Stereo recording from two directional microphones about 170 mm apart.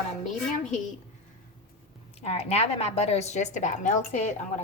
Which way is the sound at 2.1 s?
35° left (ahead or behind).